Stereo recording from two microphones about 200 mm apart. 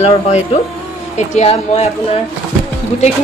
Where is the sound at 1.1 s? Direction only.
35° left (ahead or behind).